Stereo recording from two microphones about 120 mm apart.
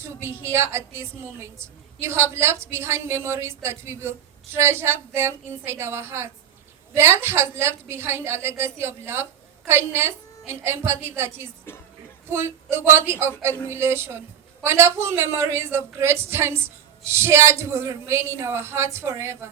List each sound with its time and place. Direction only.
0.0 s a woman's voice: 20° right (ahead or behind)